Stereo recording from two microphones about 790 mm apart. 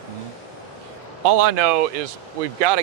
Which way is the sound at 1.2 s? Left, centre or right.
Right.